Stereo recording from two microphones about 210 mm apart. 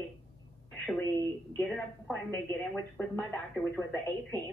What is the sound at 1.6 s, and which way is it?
Speech, centre (ahead or behind).